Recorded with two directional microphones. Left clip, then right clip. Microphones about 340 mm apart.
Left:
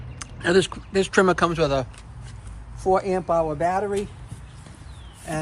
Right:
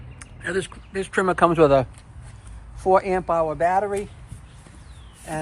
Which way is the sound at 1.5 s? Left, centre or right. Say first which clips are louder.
Right 6 dB; centre.